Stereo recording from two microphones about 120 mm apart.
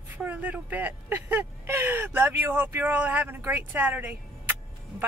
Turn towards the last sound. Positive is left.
turn(degrees=-15)  # may be behind; listen again after turning